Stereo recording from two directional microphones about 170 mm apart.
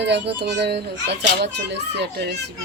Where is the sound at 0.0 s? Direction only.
80° right.